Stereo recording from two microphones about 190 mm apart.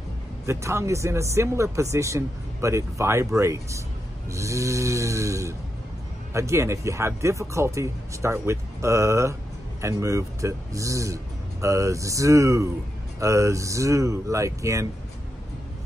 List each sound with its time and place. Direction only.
0.5 s speech: 15° right (ahead or behind)